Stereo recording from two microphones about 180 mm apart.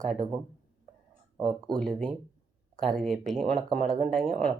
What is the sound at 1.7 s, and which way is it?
Speech, 5° left (ahead or behind).